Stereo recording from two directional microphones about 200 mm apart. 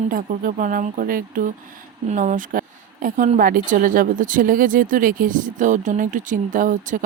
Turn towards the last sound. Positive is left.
turn(degrees=-40)  # may be behind; listen again after turning